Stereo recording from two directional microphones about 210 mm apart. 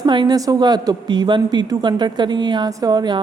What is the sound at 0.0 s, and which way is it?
A woman's voice, 20° right (ahead or behind).